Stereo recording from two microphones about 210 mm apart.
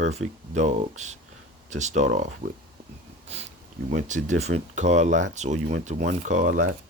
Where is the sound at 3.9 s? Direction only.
35° right (ahead or behind).